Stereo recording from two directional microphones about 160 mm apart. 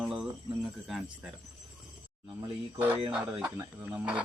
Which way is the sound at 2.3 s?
30° right (ahead or behind).